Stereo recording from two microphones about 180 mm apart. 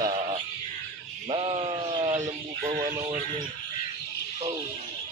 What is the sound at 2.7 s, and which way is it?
Music, 45° right (ahead or behind).